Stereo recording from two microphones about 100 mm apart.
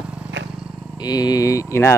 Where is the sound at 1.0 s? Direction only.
40° left (ahead or behind).